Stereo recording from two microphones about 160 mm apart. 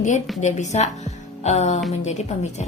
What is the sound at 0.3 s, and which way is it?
A woman's voice, 45° left (ahead or behind).